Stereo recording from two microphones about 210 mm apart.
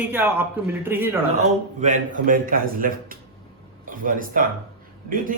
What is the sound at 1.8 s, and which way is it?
A man's voice, 40° right (ahead or behind).